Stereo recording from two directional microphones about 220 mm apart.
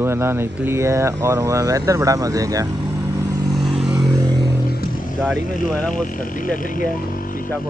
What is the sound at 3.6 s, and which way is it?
Vehicle, 5° right (ahead or behind).